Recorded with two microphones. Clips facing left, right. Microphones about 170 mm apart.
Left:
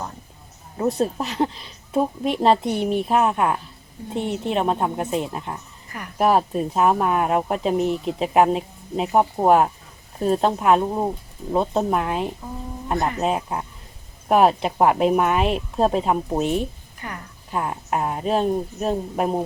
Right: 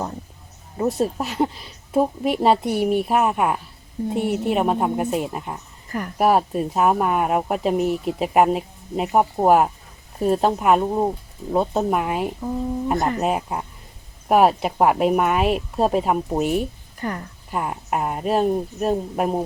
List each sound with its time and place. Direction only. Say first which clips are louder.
0.8 s speech: even; centre (ahead or behind)
17.0 s a woman's voice: right 7 dB; 40° right (ahead or behind)
17.5 s speech: even; 5° right (ahead or behind)